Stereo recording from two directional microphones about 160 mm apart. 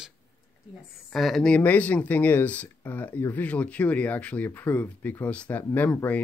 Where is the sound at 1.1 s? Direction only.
Centre (ahead or behind).